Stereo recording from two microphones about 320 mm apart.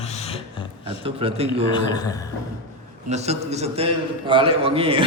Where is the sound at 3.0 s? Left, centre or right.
Right.